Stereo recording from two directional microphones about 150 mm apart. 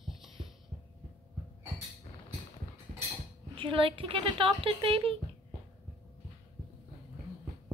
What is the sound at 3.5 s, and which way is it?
Speech, 35° right (ahead or behind).